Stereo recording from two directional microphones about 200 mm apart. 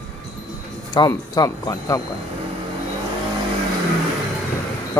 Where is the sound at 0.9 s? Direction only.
20° left (ahead or behind).